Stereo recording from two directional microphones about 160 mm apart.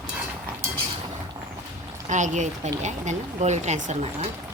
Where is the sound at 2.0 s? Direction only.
50° right (ahead or behind).